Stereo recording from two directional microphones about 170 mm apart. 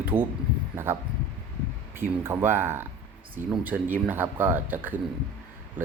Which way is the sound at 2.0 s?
15° right (ahead or behind).